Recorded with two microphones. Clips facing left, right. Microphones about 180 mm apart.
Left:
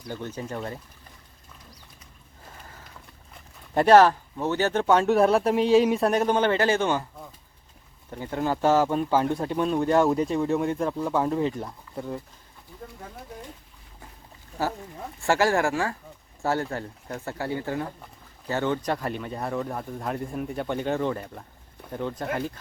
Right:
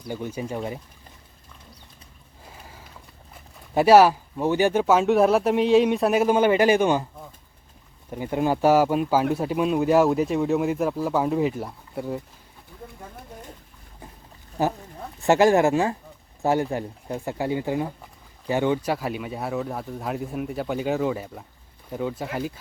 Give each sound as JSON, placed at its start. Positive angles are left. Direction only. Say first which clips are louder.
{"t": 0.1, "sound": "speech", "louder": "right 3 dB", "side_deg": -10}
{"t": 2.5, "sound": "a sound", "louder": "right 1 dB", "side_deg": -10}
{"t": 3.8, "sound": "speech", "louder": "right 2 dB", "side_deg": -10}
{"t": 8.1, "sound": "speech", "louder": "right 4 dB", "side_deg": -15}
{"t": 14.6, "sound": "speech", "louder": "right 4 dB", "side_deg": -20}